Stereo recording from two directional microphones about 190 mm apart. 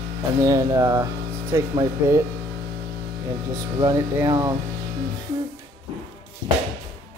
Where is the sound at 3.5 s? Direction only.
15° right (ahead or behind).